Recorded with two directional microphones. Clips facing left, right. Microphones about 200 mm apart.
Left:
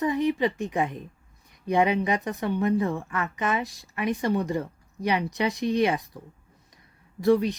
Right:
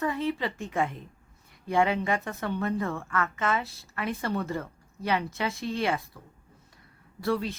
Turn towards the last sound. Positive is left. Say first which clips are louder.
# left 7 dB
turn(degrees=20)  # may be behind; listen again after turning